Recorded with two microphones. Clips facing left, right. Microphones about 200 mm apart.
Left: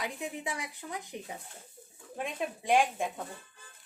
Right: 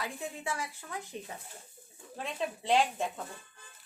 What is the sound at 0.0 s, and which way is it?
Speech, 15° left (ahead or behind).